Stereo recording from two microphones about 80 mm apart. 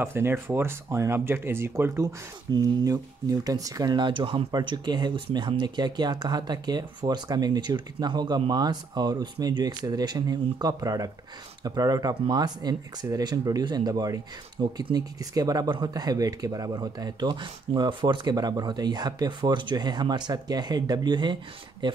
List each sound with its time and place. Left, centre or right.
0.0 s speech: right
2.6 s speech: right
3.9 s speech: right
4.6 s speech: right
21.8 s speech: right